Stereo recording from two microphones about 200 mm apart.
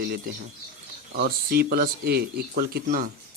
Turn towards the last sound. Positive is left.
turn(degrees=-45)  # may be behind; listen again after turning